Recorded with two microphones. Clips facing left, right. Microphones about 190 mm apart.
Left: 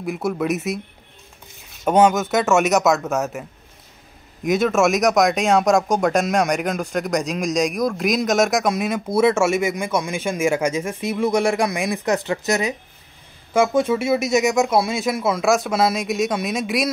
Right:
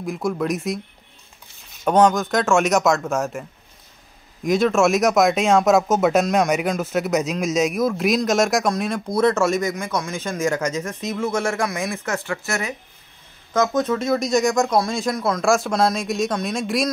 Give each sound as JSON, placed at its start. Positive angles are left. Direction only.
{"t": 0.0, "sound": "speech", "side_deg": 5}
{"t": 1.9, "sound": "speech", "side_deg": 5}
{"t": 4.5, "sound": "speech", "side_deg": 0}